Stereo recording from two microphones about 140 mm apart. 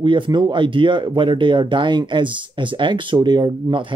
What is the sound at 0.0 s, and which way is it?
Speech, 35° right (ahead or behind).